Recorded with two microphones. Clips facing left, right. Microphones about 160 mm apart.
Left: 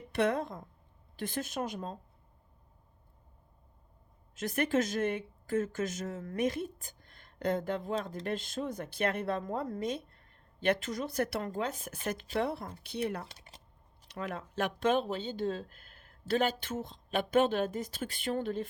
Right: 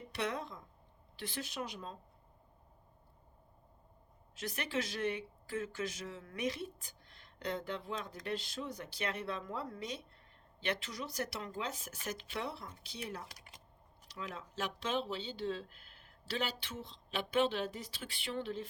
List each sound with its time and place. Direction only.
0.1 s speech: 55° left (ahead or behind)
4.4 s speech: 50° left (ahead or behind)
13.2 s typing: 30° left (ahead or behind)
14.1 s speech: 55° left (ahead or behind)